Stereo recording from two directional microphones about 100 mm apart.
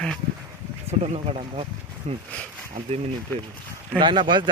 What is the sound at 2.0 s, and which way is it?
Speech, 90° right.